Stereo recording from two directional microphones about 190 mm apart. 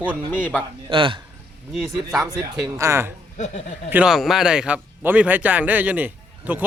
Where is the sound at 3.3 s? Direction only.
35° left (ahead or behind).